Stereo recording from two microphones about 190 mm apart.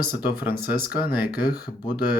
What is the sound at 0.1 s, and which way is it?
Speech, 50° left (ahead or behind).